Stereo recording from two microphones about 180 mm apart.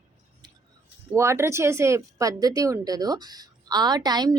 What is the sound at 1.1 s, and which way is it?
A woman's voice, 15° right (ahead or behind).